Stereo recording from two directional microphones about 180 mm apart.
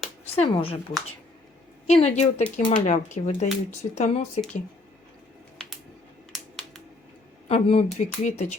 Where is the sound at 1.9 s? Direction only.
35° left (ahead or behind).